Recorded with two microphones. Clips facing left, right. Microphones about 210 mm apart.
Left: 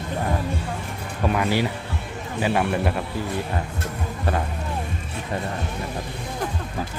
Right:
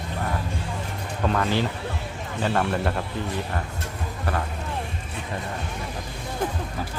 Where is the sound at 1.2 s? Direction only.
10° left (ahead or behind).